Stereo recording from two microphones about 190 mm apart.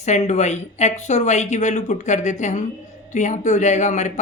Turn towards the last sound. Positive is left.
turn(degrees=40)  # may be behind; listen again after turning